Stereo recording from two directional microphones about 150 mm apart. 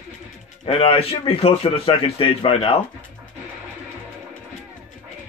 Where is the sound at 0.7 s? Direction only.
40° left (ahead or behind).